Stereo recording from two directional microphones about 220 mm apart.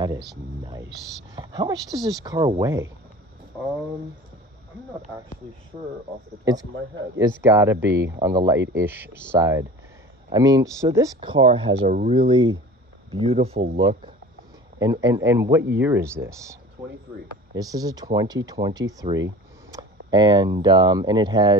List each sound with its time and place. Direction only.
0.7 s speech: 20° right (ahead or behind)
6.4 s speech: 15° right (ahead or behind)
17.6 s speech: 15° right (ahead or behind)